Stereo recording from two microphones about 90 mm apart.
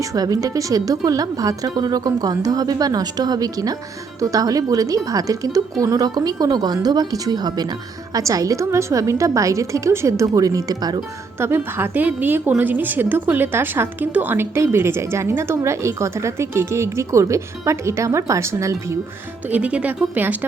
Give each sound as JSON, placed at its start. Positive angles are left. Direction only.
{"t": 0.0, "sound": "a woman's voice", "side_deg": -40}
{"t": 11.3, "sound": "a woman's voice", "side_deg": -25}
{"t": 19.5, "sound": "a woman's voice", "side_deg": -15}